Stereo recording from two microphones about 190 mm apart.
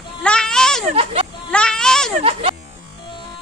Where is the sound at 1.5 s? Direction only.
5° left (ahead or behind).